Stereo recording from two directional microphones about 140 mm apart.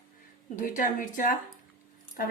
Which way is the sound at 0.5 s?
70° left (ahead or behind).